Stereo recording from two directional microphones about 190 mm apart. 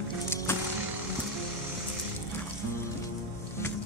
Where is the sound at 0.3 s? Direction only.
15° left (ahead or behind).